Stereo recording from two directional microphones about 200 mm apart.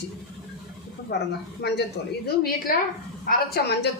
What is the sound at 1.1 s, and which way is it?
A woman's voice, 60° left (ahead or behind).